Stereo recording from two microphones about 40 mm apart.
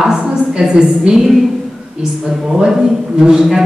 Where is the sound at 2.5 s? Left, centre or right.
Centre.